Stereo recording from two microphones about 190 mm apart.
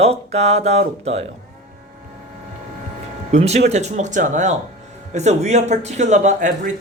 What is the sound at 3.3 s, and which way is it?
Speech, 35° right (ahead or behind).